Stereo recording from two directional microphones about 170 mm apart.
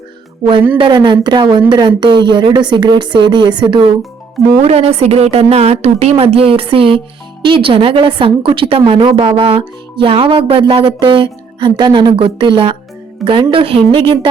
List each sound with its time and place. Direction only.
0.8 s a woman's voice: 30° right (ahead or behind)